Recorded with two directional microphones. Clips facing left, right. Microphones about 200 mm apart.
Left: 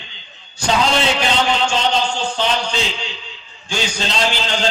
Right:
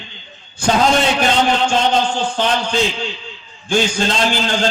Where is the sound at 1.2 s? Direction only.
50° right (ahead or behind).